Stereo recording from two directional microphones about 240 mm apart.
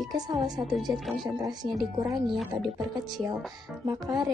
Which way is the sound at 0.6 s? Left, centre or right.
Centre.